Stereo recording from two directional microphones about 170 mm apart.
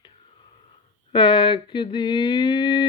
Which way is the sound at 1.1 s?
30° left (ahead or behind).